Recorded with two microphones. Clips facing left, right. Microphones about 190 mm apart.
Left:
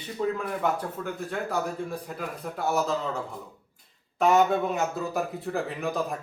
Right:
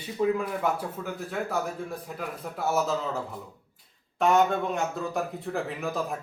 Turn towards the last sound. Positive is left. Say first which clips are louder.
# left 1 dB
turn(degrees=0)  # may be behind; listen again after turning